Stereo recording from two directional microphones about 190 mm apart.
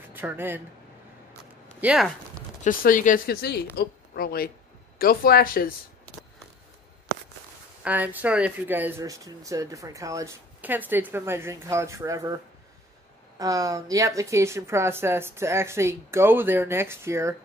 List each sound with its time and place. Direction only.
0.1 s speech: 10° right (ahead or behind)
1.8 s speech: 5° right (ahead or behind)
2.6 s speech: 45° left (ahead or behind)
7.8 s speech: 10° right (ahead or behind)
13.4 s speech: 20° right (ahead or behind)